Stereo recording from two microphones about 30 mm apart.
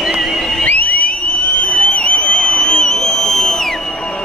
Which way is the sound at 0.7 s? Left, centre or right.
Left.